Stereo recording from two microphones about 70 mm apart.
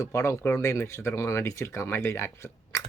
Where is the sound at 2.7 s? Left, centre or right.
Left.